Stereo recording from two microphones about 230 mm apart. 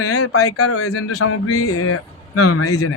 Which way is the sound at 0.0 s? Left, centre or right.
Left.